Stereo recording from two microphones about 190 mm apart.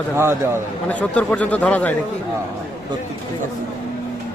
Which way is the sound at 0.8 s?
5° left (ahead or behind).